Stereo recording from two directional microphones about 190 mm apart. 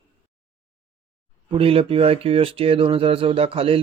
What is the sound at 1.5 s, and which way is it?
Speech, 30° right (ahead or behind).